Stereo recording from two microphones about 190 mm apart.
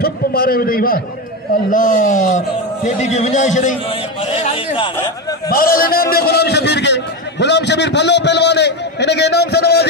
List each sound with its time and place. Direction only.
0.0 s a man's voice: 50° left (ahead or behind)
4.4 s a man's voice: 30° left (ahead or behind)
5.5 s a man's voice: 50° left (ahead or behind)